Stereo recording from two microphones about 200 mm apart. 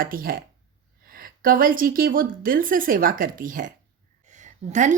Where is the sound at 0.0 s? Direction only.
45° right (ahead or behind).